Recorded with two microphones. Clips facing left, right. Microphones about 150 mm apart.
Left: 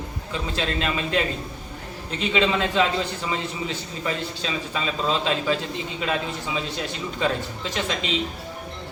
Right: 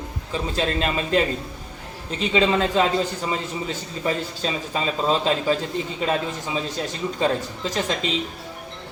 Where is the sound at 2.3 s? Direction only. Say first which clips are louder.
Right 3 dB; 35° right (ahead or behind).